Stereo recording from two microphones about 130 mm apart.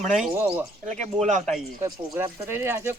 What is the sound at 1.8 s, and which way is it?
Speech, 20° right (ahead or behind).